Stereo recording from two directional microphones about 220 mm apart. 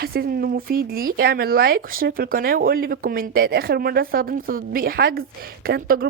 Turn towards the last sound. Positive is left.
turn(degrees=-40)  # may be behind; listen again after turning